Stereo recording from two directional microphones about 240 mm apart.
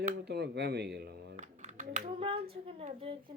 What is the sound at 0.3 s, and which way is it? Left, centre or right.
A woman's voice, right.